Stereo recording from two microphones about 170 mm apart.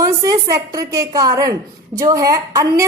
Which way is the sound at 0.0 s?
20° right (ahead or behind).